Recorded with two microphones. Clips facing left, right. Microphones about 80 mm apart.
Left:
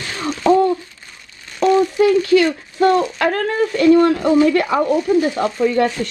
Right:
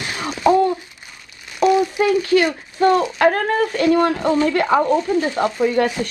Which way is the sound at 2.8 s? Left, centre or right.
Right.